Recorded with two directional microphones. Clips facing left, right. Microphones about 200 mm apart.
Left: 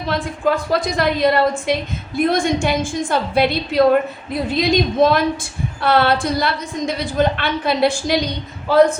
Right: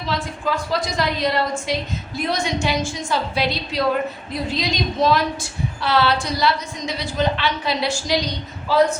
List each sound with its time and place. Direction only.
0.1 s a woman's voice: 55° left (ahead or behind)